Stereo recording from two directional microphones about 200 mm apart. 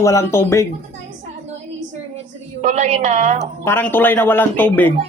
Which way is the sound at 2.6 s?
35° right (ahead or behind).